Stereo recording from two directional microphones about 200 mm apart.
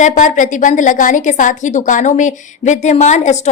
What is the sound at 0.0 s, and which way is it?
A woman's voice, 40° left (ahead or behind).